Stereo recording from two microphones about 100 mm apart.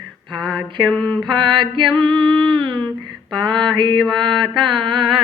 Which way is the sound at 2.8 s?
10° left (ahead or behind).